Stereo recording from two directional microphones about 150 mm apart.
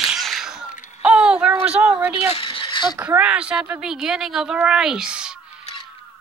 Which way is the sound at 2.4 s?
35° left (ahead or behind).